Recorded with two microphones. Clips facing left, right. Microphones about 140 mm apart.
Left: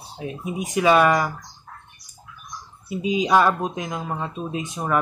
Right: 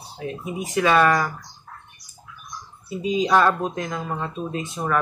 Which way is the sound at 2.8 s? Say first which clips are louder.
Even; 15° left (ahead or behind).